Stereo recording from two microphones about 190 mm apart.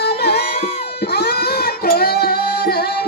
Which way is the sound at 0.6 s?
35° left (ahead or behind).